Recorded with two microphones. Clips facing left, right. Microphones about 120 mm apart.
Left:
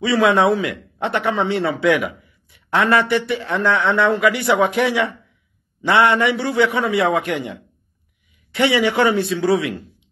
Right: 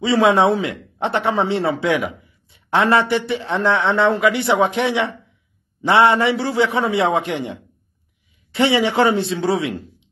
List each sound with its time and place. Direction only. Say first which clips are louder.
0.0 s a man's voice: right 1 dB; 25° right (ahead or behind)
8.5 s a man's voice: even; 25° right (ahead or behind)